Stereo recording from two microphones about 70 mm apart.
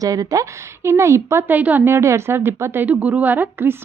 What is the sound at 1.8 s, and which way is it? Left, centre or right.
A woman's voice, right.